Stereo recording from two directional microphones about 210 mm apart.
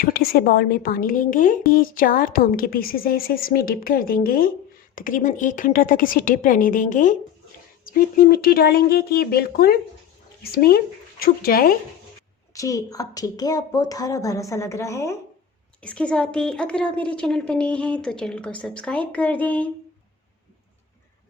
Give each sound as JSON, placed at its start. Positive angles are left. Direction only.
{"t": 0.0, "sound": "a woman's voice", "side_deg": 45}
{"t": 12.5, "sound": "a woman's voice", "side_deg": 15}